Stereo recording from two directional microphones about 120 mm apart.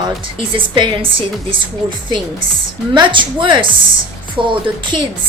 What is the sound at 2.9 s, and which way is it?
A woman's voice, 40° right (ahead or behind).